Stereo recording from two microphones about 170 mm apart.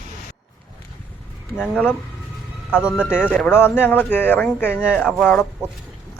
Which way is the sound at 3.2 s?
10° left (ahead or behind).